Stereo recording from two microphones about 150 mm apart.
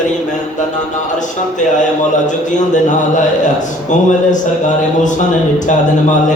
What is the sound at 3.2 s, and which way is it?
A man's voice, 55° left (ahead or behind).